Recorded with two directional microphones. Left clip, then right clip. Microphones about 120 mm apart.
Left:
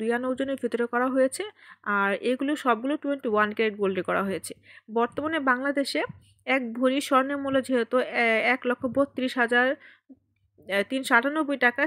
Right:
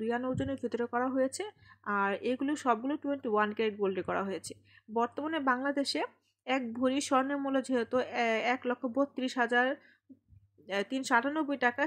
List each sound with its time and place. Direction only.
0.0 s speech: 20° left (ahead or behind)